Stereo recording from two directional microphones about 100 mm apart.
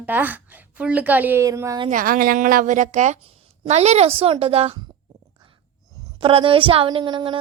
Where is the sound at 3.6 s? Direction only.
90° right.